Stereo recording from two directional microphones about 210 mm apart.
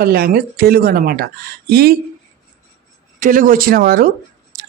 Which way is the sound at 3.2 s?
40° right (ahead or behind).